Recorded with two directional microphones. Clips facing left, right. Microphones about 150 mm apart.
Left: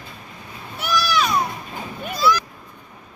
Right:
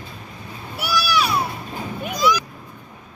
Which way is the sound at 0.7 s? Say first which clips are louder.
Even; 10° right (ahead or behind).